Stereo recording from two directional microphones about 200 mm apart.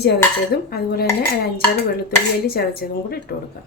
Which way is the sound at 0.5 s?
50° left (ahead or behind).